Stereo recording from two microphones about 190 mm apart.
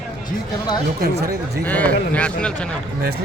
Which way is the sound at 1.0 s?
55° right (ahead or behind).